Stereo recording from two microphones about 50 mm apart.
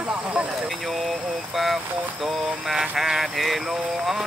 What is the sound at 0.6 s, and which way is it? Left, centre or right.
Vehicle, centre.